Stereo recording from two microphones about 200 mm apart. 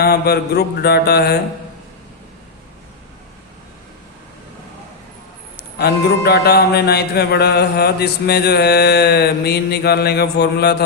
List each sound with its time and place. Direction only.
0.0 s mantra: 50° left (ahead or behind)
5.8 s mantra: 50° left (ahead or behind)